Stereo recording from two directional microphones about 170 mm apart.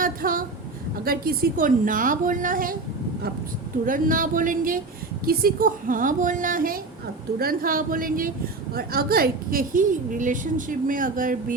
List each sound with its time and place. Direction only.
0.0 s a sound: 55° right (ahead or behind)
1.0 s a woman's voice: 60° right (ahead or behind)
3.8 s a woman's voice: 55° right (ahead or behind)